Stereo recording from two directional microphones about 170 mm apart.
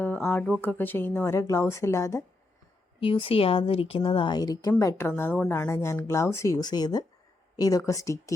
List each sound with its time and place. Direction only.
0.0 s a sound: 10° left (ahead or behind)
0.6 s speech: 10° left (ahead or behind)
3.0 s a woman's voice: 30° left (ahead or behind)